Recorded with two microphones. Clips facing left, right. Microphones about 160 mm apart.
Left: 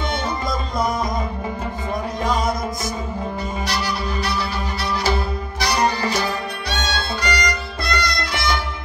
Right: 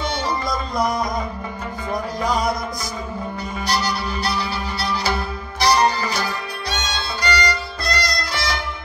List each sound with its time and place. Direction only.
3.6 s music: 35° right (ahead or behind)
7.2 s music: 30° right (ahead or behind)